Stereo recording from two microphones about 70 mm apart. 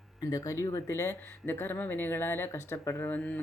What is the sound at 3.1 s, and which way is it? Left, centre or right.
Speech, left.